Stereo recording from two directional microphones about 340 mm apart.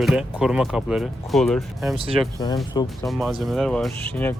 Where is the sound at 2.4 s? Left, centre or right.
Centre.